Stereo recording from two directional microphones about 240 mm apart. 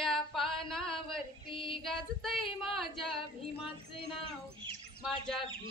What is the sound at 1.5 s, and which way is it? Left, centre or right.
Female singing, left.